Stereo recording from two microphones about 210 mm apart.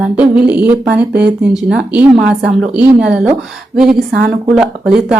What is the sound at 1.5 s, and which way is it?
Speech, 5° right (ahead or behind).